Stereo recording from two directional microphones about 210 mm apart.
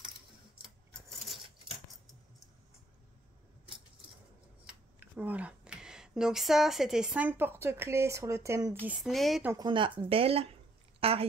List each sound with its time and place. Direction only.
4.6 s speech: 10° right (ahead or behind)
9.5 s a woman's voice: 20° right (ahead or behind)